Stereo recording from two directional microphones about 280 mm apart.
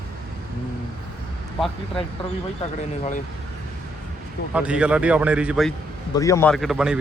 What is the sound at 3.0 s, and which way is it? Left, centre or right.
Speech, left.